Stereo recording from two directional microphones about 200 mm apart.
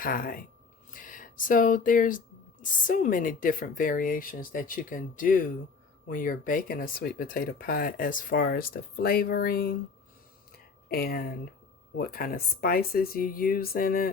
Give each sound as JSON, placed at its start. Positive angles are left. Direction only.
{"t": 0.0, "sound": "speech", "side_deg": 45}
{"t": 10.8, "sound": "speech", "side_deg": 50}